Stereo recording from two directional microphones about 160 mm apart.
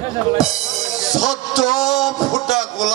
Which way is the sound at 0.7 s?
Centre (ahead or behind).